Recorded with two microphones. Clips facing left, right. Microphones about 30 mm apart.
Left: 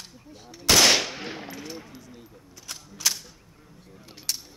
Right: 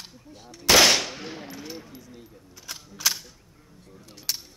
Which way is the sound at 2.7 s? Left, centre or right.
Centre.